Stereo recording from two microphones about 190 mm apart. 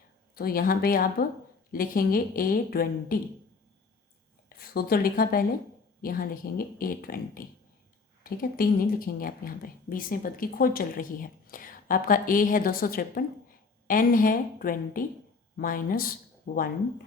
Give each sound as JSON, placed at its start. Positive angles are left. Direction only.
{"t": 0.3, "sound": "speech", "side_deg": 50}
{"t": 4.4, "sound": "speech", "side_deg": 55}